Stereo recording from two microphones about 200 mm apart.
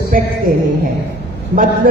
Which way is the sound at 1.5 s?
45° right (ahead or behind).